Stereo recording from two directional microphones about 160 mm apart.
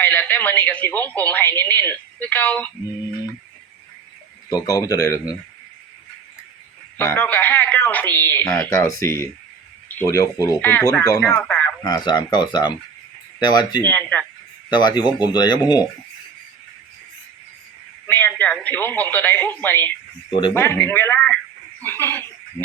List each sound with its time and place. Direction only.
0.0 s speech: 10° left (ahead or behind)
4.4 s speech: 25° left (ahead or behind)
6.9 s speech: 15° left (ahead or behind)
11.4 s a sound: 5° left (ahead or behind)
11.8 s speech: 25° left (ahead or behind)
13.8 s speech: 10° left (ahead or behind)
14.7 s speech: 25° left (ahead or behind)
18.0 s speech: 10° left (ahead or behind)